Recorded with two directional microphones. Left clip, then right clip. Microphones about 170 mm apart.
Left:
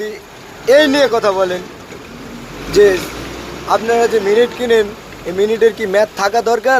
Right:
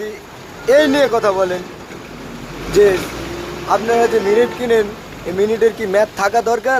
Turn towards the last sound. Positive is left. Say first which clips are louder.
# left 1 dB
turn(degrees=10)  # may be behind; listen again after turning